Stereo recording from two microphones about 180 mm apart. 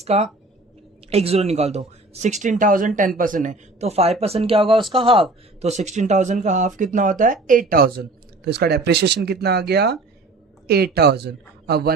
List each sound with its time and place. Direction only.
0.0 s speech: 35° right (ahead or behind); by 11.9 s 65° right (ahead or behind)